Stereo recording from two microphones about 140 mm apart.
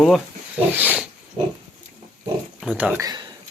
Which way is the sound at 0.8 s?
10° right (ahead or behind).